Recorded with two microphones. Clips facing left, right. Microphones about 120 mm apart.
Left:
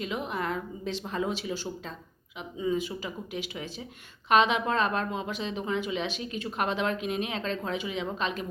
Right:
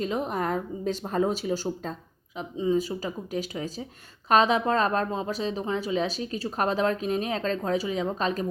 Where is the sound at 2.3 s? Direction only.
30° right (ahead or behind).